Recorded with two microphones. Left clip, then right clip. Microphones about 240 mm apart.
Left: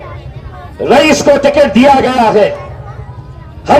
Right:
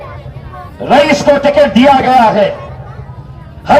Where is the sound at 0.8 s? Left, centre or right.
Left.